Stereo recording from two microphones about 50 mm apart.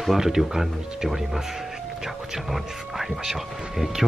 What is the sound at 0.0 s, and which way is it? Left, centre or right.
A man's voice, centre.